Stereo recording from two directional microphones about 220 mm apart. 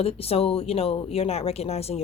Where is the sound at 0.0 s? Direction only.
25° left (ahead or behind).